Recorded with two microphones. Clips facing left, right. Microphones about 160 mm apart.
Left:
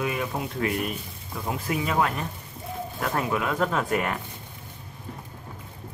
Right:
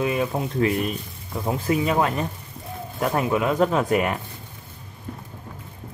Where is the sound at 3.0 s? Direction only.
20° right (ahead or behind).